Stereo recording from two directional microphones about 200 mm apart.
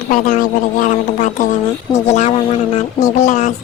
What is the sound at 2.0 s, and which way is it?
Speech, 35° left (ahead or behind).